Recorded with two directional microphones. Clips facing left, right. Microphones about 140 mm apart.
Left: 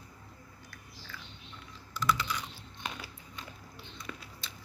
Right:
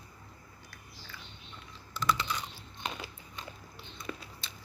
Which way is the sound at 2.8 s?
25° right (ahead or behind).